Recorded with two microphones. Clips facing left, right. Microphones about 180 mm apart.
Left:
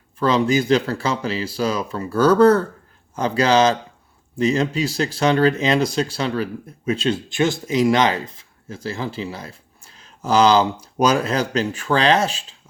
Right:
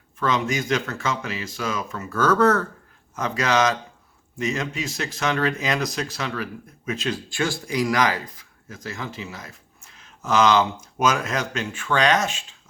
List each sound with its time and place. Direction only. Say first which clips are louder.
0.2 s speech: left 6 dB; 30° left (ahead or behind)